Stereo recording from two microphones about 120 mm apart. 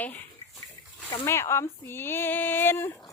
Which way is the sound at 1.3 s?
20° left (ahead or behind).